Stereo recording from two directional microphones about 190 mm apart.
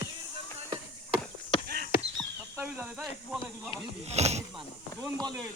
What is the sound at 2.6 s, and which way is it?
Speech, 15° right (ahead or behind).